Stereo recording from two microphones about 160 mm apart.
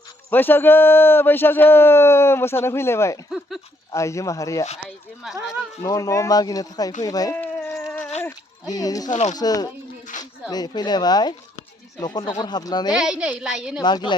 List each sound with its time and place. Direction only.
0.3 s a man's voice: 10° left (ahead or behind)
5.8 s speech: 20° left (ahead or behind)
7.3 s dog: 10° left (ahead or behind)
8.6 s speech: 25° left (ahead or behind)
9.0 s speech: 45° left (ahead or behind)
9.3 s speech: 25° left (ahead or behind)
10.1 s a sound: 50° left (ahead or behind)
10.5 s speech: 25° left (ahead or behind)
12.9 s a woman's voice: 5° right (ahead or behind)
13.8 s speech: 30° left (ahead or behind)